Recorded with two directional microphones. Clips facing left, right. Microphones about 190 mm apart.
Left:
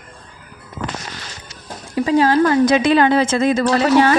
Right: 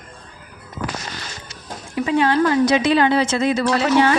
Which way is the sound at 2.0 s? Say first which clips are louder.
Left 3 dB; 35° left (ahead or behind).